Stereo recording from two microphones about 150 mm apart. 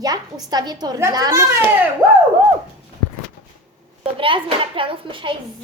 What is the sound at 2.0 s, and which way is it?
Speech, 10° right (ahead or behind).